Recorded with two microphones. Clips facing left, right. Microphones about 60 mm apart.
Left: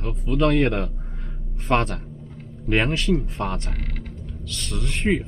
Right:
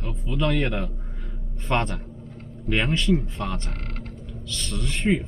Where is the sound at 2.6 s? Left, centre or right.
Left.